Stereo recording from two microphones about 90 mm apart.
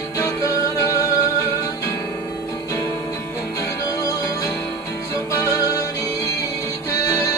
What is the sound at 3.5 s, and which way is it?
Music, 40° left (ahead or behind).